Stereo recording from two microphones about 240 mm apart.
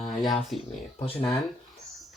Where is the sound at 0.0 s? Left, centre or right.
Centre.